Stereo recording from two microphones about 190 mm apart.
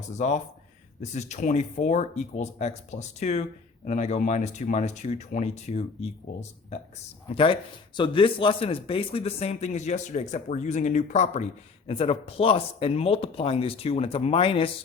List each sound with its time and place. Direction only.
0.2 s speech: 35° left (ahead or behind)